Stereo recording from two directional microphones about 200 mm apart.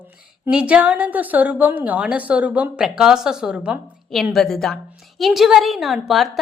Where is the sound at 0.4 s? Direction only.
5° right (ahead or behind).